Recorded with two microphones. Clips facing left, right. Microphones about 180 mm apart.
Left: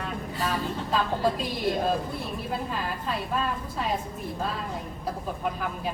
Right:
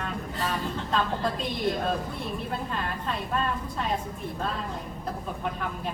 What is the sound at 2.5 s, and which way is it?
Speech, 5° left (ahead or behind).